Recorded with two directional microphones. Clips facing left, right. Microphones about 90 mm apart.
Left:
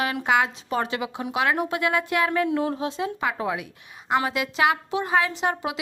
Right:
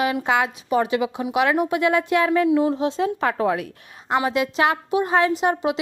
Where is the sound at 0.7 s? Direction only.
20° right (ahead or behind); by 3.5 s 40° right (ahead or behind).